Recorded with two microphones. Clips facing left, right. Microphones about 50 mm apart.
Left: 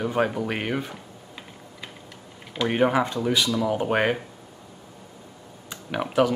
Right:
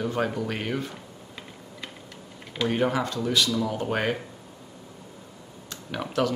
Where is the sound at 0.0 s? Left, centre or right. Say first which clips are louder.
Left 3 dB; centre.